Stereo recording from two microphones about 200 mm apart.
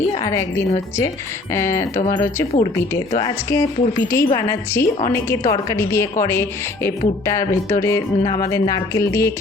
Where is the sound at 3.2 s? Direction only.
15° left (ahead or behind).